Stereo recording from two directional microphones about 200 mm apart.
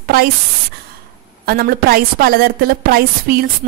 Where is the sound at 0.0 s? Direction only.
50° right (ahead or behind).